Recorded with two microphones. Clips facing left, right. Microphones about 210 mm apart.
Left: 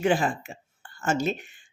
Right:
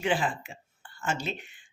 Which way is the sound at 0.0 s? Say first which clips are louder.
Left 5 dB; 45° left (ahead or behind).